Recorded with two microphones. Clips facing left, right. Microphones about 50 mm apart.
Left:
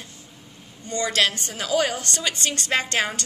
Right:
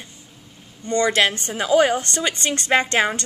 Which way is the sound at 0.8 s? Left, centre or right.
Right.